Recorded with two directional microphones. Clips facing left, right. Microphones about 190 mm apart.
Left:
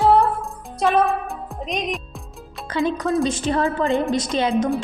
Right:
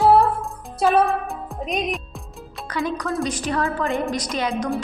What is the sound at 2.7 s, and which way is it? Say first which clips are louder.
A woman's voice: left 4 dB; 25° left (ahead or behind).